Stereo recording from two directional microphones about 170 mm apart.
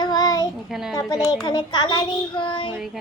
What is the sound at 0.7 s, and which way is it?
Speech, 5° right (ahead or behind).